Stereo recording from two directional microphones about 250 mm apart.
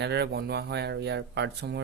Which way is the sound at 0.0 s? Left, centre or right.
Right.